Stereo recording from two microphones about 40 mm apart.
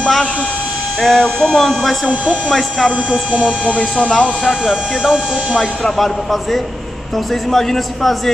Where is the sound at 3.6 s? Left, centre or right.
Left.